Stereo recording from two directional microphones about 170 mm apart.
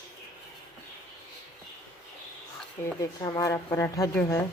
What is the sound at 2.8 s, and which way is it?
Speech, 20° left (ahead or behind).